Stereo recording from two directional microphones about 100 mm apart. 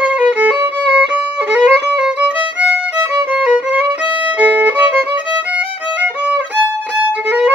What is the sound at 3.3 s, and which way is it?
Violin, 10° right (ahead or behind).